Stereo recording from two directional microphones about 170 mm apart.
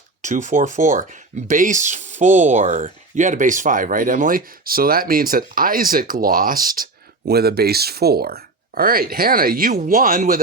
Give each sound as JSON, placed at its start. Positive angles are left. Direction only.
{"t": 0.2, "sound": "speech", "side_deg": -45}
{"t": 7.3, "sound": "speech", "side_deg": -70}